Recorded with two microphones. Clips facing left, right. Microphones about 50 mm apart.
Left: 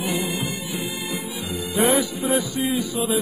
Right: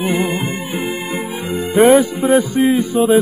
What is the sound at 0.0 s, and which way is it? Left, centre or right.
Music, right.